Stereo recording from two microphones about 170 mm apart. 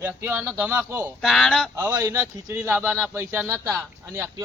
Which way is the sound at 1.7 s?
15° right (ahead or behind).